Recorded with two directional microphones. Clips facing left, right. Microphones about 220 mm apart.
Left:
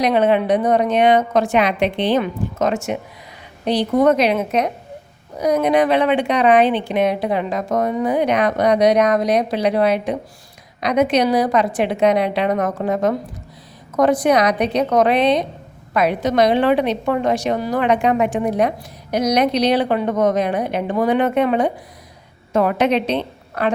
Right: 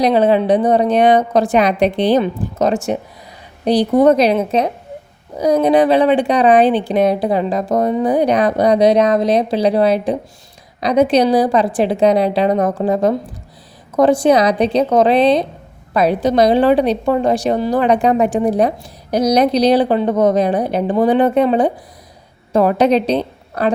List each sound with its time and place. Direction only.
0.0 s a woman's voice: 35° right (ahead or behind)